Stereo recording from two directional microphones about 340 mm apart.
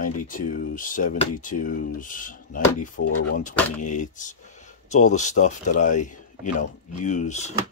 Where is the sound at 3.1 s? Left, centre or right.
Left.